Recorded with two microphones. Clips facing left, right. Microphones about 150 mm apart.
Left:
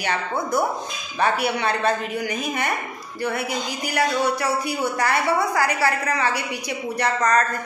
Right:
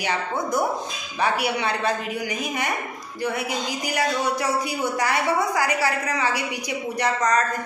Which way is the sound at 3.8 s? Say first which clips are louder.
Left 3 dB; 15° right (ahead or behind).